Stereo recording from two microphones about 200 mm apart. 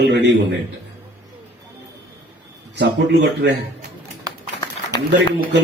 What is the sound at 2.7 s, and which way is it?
Speech, 60° right (ahead or behind).